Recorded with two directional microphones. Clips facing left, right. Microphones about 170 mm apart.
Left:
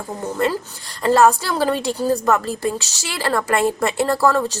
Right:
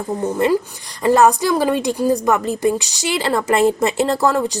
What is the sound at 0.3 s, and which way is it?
A woman's voice, 15° right (ahead or behind).